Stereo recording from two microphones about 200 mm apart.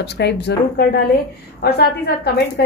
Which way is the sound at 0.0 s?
55° left (ahead or behind).